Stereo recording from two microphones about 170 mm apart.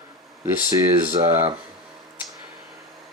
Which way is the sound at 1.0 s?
15° right (ahead or behind).